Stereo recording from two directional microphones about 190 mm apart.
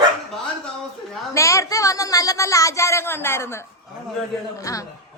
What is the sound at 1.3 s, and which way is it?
Speech, 15° left (ahead or behind).